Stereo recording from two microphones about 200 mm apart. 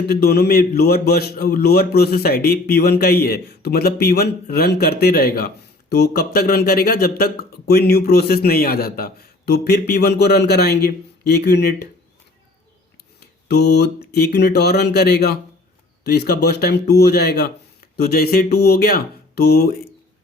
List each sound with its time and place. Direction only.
0.1 s speech: 55° left (ahead or behind)
13.1 s speech: 55° left (ahead or behind)